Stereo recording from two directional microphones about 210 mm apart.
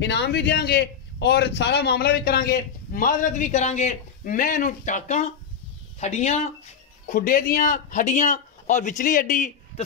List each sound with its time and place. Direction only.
0.0 s a man's voice: 55° left (ahead or behind); by 6.5 s 30° left (ahead or behind)
7.1 s a man's voice: 40° left (ahead or behind)